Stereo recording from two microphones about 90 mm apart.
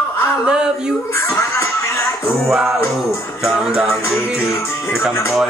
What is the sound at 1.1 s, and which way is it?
Speech, 30° left (ahead or behind).